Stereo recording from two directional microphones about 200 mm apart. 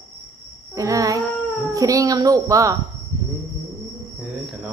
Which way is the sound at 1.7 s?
15° right (ahead or behind).